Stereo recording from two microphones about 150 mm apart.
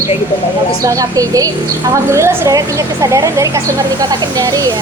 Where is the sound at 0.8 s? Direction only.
25° right (ahead or behind).